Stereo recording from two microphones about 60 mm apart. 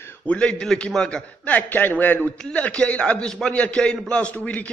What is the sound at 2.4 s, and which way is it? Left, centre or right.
A man's voice, centre.